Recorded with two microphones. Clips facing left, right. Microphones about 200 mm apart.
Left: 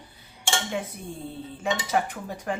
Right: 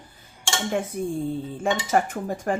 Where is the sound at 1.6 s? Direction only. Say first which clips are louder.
Right 3 dB; 50° right (ahead or behind).